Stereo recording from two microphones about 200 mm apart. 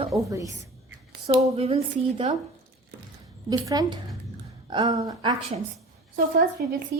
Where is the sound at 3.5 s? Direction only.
20° right (ahead or behind).